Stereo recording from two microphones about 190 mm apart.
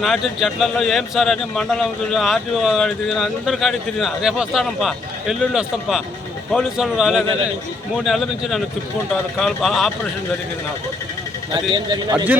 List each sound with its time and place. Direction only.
0.0 s speech: centre (ahead or behind)
11.7 s speech: 20° right (ahead or behind)
12.1 s speech: 10° right (ahead or behind)